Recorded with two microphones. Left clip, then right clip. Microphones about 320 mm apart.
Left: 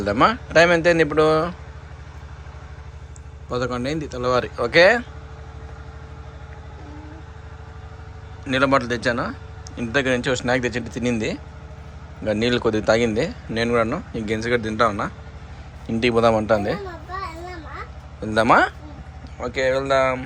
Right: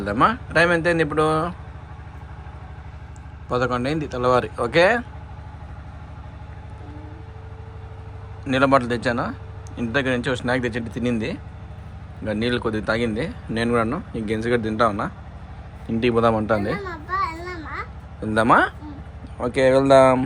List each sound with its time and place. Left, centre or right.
0.0 s a man's voice: centre
3.5 s a man's voice: centre
8.4 s a man's voice: centre
18.2 s a man's voice: centre